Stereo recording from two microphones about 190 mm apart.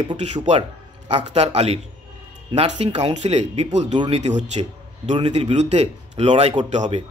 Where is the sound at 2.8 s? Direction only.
30° right (ahead or behind).